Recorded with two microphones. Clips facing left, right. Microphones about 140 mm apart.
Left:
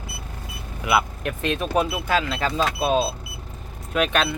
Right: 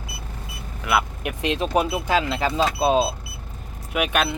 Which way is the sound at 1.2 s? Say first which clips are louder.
Right 1 dB; 15° right (ahead or behind).